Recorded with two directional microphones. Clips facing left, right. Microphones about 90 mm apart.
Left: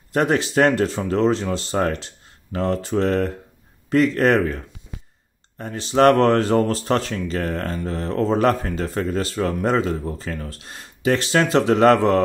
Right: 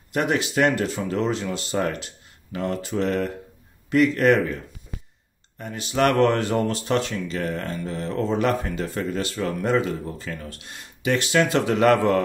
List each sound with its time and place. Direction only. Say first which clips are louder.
0.1 s speech: left 4 dB; 35° left (ahead or behind)
5.6 s speech: left 5 dB; 35° left (ahead or behind)